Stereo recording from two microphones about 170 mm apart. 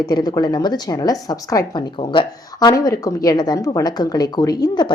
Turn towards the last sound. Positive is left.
turn(degrees=25)  # may be behind; listen again after turning